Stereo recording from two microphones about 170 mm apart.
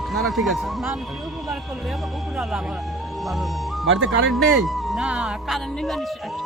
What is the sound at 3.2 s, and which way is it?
Speech, centre (ahead or behind).